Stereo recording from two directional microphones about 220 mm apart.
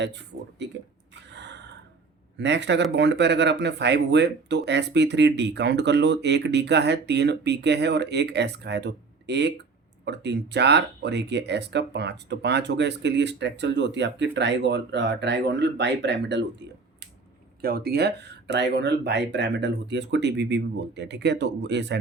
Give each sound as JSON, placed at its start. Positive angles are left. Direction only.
{"t": 1.3, "sound": "gasp", "side_deg": -50}
{"t": 2.4, "sound": "speech", "side_deg": -55}